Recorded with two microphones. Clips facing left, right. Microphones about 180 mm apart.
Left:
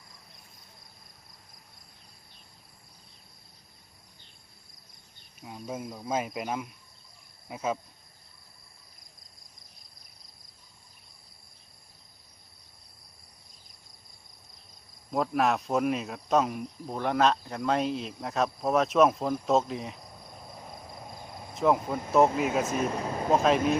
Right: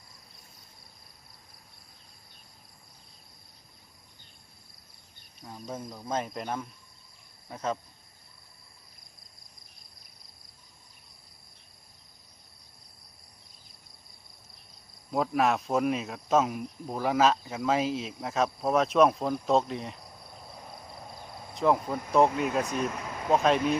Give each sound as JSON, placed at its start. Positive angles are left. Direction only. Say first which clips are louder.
{"t": 5.4, "sound": "cricket", "louder": "left 2 dB", "side_deg": 10}
{"t": 7.4, "sound": "speech", "louder": "left 1 dB", "side_deg": 10}
{"t": 15.1, "sound": "speech", "louder": "even", "side_deg": 0}
{"t": 21.5, "sound": "speech", "louder": "even", "side_deg": 0}
{"t": 22.9, "sound": "speech", "louder": "left 5 dB", "side_deg": 35}
{"t": 23.3, "sound": "speech", "louder": "even", "side_deg": 0}